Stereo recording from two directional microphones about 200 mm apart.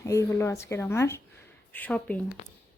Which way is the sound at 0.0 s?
15° left (ahead or behind).